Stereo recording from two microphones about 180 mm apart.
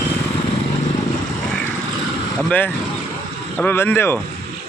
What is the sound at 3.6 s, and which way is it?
Speech, 10° left (ahead or behind).